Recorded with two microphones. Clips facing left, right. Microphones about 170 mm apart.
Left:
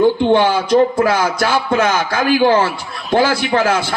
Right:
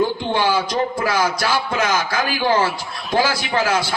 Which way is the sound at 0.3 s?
50° left (ahead or behind).